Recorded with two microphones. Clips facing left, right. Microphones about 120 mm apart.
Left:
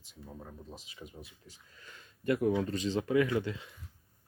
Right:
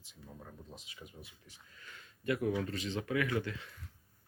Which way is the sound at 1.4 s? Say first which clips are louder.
Left 2 dB; 30° left (ahead or behind).